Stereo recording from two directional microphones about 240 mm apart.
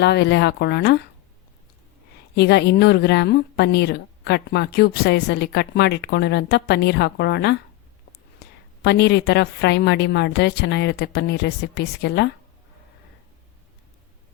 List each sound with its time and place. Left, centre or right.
0.0 s a woman's voice: left
2.3 s a woman's voice: left